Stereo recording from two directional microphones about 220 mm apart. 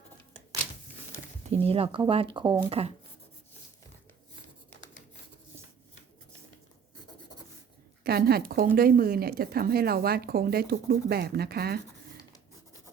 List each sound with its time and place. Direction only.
1.5 s speech: 25° right (ahead or behind)
8.0 s speech: 45° right (ahead or behind)